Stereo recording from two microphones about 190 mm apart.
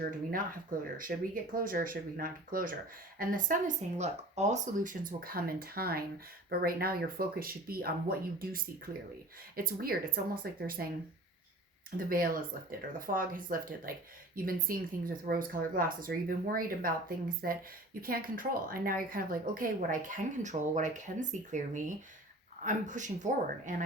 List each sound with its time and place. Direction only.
0.0 s a woman's voice: 50° right (ahead or behind)
1.5 s a woman's voice: 45° right (ahead or behind)
11.9 s a woman's voice: 50° right (ahead or behind)